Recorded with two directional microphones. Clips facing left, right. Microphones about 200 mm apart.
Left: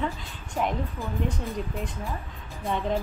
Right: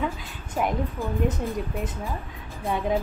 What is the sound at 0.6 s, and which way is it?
Speech, 15° right (ahead or behind).